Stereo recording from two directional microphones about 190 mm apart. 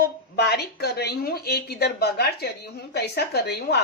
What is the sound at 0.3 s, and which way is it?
Speech, 60° left (ahead or behind).